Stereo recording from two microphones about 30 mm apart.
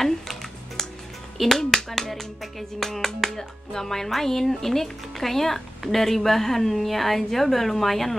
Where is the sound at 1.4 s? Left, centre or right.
Centre.